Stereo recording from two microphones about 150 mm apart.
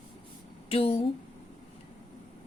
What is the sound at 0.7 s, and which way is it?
Speech, 40° left (ahead or behind).